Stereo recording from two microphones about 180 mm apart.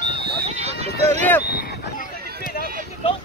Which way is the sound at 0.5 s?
35° right (ahead or behind).